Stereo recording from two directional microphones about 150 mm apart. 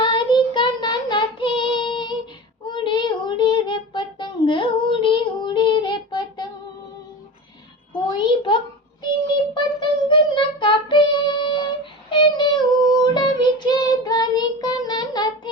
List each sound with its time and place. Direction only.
0.0 s child singing: 30° left (ahead or behind)
8.2 s a sound: 35° left (ahead or behind)
9.6 s child singing: 35° left (ahead or behind)